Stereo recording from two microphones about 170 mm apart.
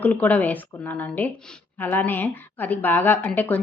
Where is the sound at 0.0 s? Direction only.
10° left (ahead or behind).